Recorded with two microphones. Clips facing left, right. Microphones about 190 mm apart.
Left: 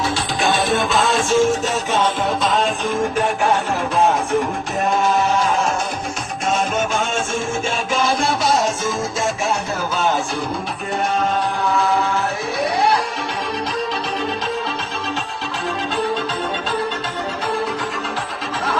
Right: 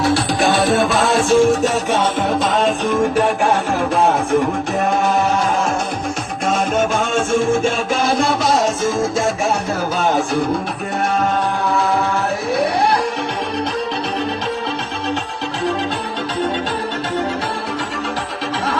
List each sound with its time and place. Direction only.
0.0 s music: 65° right (ahead or behind)
0.9 s music: 35° right (ahead or behind)
1.7 s music: 55° right (ahead or behind)